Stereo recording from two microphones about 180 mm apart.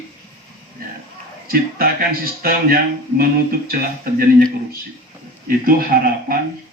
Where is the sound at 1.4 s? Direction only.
55° right (ahead or behind).